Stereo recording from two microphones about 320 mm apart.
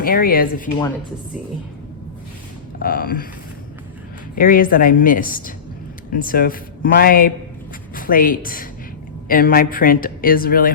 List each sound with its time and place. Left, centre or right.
0.0 s speech: left
2.8 s speech: left
4.4 s speech: left